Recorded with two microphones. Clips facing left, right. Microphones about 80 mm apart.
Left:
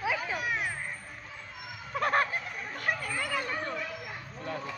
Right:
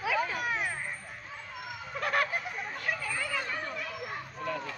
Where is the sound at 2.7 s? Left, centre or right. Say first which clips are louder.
Left 3 dB; left.